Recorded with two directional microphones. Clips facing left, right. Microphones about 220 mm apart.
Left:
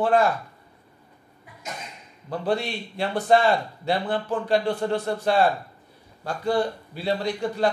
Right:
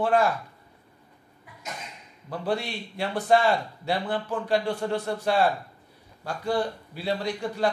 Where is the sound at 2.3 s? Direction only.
10° right (ahead or behind).